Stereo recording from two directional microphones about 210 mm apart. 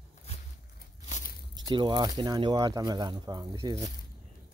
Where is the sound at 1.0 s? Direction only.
35° left (ahead or behind).